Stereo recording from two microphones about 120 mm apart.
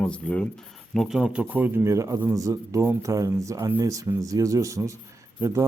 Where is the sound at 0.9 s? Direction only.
5° right (ahead or behind).